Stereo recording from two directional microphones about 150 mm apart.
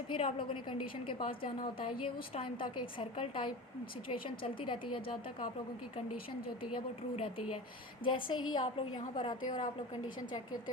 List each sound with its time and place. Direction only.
0.1 s a woman's voice: 35° left (ahead or behind)
6.6 s a woman's voice: 35° left (ahead or behind)